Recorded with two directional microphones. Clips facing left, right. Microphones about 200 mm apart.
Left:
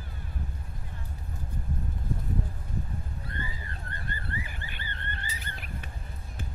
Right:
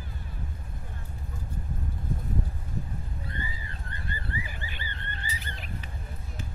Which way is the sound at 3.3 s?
50° left (ahead or behind).